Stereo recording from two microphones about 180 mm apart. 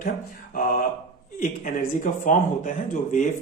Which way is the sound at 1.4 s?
45° left (ahead or behind).